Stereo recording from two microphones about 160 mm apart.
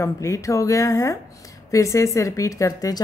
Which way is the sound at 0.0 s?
20° left (ahead or behind).